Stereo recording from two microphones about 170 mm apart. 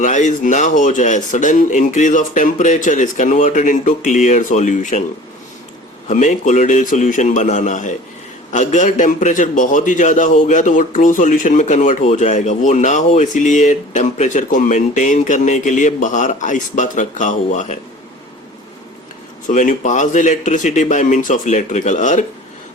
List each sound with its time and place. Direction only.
0.0 s a man's voice: 45° left (ahead or behind)
6.1 s a man's voice: 45° left (ahead or behind)
19.5 s a man's voice: 50° left (ahead or behind)